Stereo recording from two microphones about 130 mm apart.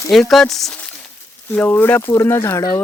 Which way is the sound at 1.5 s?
15° left (ahead or behind).